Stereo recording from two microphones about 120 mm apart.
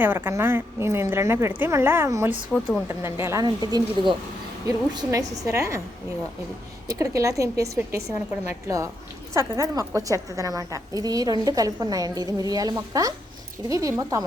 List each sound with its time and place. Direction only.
0.0 s speech: 20° right (ahead or behind)
2.5 s a woman's voice: 5° left (ahead or behind)
3.0 s speech: 20° right (ahead or behind)
3.4 s a woman's voice: 35° right (ahead or behind)
6.8 s a woman's voice: 25° right (ahead or behind)